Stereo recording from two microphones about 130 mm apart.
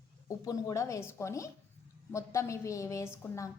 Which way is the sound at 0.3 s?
25° left (ahead or behind).